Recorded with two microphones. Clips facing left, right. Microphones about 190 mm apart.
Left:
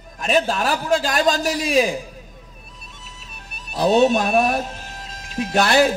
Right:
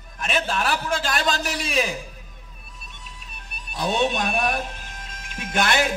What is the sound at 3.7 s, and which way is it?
Speech, 40° left (ahead or behind).